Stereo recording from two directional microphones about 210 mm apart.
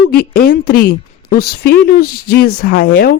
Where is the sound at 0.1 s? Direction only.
45° left (ahead or behind).